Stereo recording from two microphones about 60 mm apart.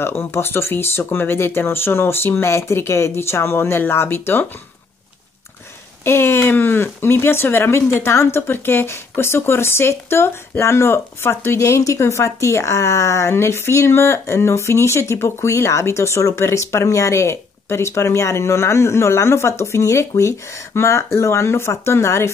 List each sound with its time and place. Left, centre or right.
0.0 s speech: left
6.0 s speech: left
11.6 s speech: left